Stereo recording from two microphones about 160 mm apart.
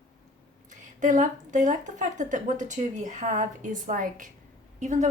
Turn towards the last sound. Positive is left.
turn(degrees=-50)  # may be behind; listen again after turning